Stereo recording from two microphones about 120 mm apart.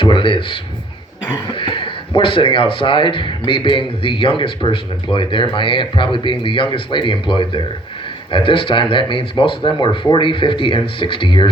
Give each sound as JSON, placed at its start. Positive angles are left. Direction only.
{"t": 0.0, "sound": "speech", "side_deg": 45}